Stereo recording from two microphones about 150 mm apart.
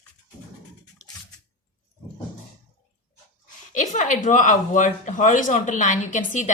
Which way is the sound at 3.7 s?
55° left (ahead or behind).